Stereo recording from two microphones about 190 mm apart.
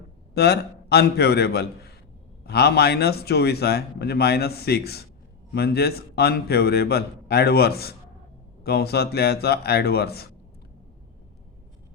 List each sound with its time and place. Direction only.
0.3 s speech: 60° left (ahead or behind)